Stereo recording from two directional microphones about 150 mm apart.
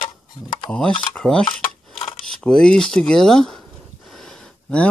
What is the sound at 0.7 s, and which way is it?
Speech, 5° left (ahead or behind).